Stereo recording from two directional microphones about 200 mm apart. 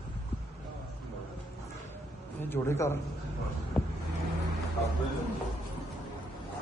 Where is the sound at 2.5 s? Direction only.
10° left (ahead or behind).